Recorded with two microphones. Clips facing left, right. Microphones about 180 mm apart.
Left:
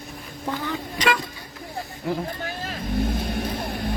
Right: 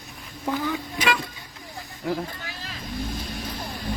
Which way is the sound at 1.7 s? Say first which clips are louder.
Left 1 dB; 15° left (ahead or behind).